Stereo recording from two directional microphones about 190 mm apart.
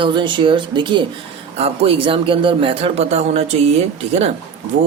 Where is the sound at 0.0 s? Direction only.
25° right (ahead or behind).